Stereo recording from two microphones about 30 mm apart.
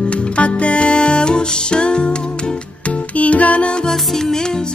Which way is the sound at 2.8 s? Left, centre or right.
Left.